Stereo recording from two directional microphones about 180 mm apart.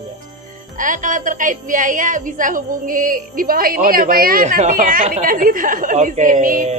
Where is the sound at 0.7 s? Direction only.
45° right (ahead or behind).